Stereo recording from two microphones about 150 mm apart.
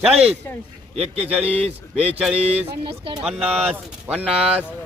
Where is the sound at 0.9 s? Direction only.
45° right (ahead or behind).